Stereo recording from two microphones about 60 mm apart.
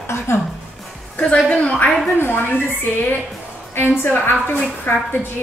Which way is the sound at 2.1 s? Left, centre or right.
Left.